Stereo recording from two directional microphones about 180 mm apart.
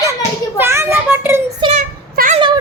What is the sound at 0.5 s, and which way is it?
A child's voice, 15° right (ahead or behind).